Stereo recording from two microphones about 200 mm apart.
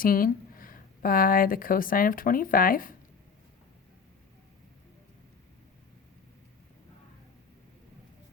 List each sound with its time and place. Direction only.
0.0 s speech: 45° left (ahead or behind)